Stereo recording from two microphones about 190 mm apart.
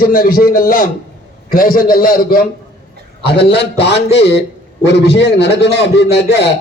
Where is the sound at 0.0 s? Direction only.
50° left (ahead or behind).